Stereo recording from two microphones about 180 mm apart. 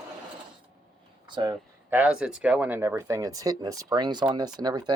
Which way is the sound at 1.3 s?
25° right (ahead or behind).